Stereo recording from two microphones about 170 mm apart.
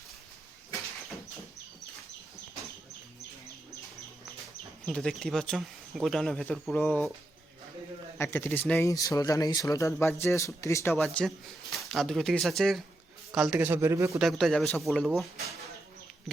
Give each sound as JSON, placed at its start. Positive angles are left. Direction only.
{"t": 4.9, "sound": "speech", "side_deg": 5}
{"t": 8.2, "sound": "speech", "side_deg": 15}
{"t": 10.9, "sound": "speech", "side_deg": 5}
{"t": 14.2, "sound": "speech", "side_deg": 0}